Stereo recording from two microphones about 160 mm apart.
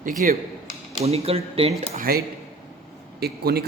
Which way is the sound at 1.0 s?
40° right (ahead or behind).